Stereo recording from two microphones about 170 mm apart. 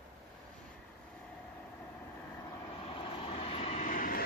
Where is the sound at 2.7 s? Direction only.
30° left (ahead or behind); by 4.2 s 50° left (ahead or behind).